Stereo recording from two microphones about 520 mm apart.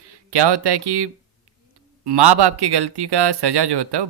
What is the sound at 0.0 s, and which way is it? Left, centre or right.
Speech, right.